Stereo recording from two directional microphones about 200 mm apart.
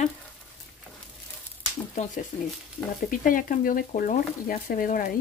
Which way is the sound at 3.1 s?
45° left (ahead or behind).